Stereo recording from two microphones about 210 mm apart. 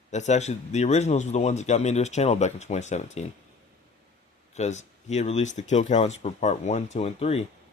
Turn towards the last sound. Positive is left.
turn(degrees=30)  # may be behind; listen again after turning